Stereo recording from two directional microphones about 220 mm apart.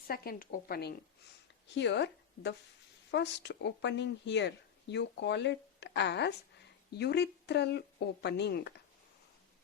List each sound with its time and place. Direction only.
0.1 s speech: 40° left (ahead or behind)